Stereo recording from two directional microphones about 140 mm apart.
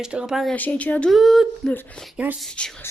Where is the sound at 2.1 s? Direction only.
10° right (ahead or behind).